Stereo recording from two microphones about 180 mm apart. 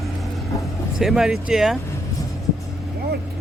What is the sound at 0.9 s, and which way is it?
Speech, centre (ahead or behind).